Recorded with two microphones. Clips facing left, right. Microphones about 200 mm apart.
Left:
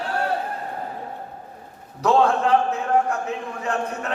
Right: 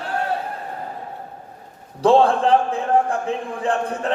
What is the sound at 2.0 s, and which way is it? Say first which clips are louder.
A man's voice: right 3 dB; 30° right (ahead or behind).